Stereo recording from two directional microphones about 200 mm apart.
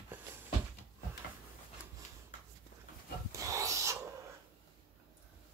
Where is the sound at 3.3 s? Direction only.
15° right (ahead or behind).